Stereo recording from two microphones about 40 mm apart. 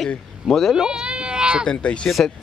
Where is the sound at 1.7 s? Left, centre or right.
Left.